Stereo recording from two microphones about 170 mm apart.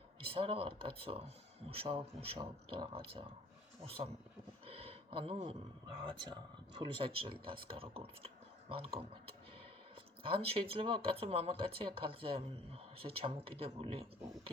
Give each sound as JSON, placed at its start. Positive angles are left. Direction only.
{"t": 0.2, "sound": "speech", "side_deg": -35}
{"t": 4.6, "sound": "a sound", "side_deg": -35}
{"t": 6.0, "sound": "speech", "side_deg": -30}
{"t": 10.2, "sound": "speech", "side_deg": -35}